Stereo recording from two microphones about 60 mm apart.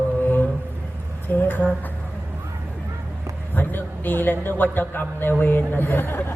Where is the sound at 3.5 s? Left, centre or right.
Left.